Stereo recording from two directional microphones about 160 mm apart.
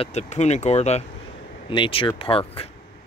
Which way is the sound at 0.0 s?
45° left (ahead or behind).